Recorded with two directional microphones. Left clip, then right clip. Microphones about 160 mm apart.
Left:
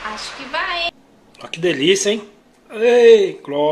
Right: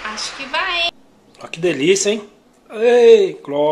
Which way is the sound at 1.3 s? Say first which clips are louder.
Even; 5° right (ahead or behind).